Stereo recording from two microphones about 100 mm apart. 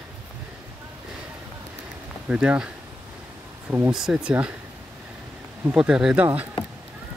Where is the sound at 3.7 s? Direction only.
15° right (ahead or behind).